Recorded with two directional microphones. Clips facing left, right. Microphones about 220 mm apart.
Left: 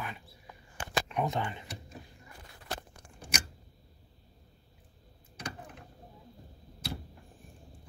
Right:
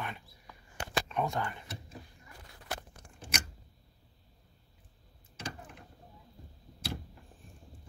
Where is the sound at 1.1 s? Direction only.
15° left (ahead or behind).